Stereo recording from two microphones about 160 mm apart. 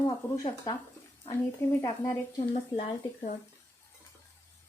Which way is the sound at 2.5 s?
45° left (ahead or behind).